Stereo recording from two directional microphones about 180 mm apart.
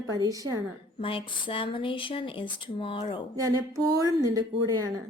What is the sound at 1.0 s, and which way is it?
Speech, 30° left (ahead or behind).